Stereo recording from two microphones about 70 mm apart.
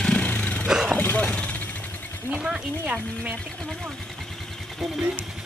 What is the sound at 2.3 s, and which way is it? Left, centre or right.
Sewing machine, centre.